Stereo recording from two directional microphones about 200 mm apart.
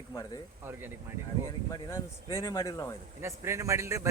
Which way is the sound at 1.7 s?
20° left (ahead or behind).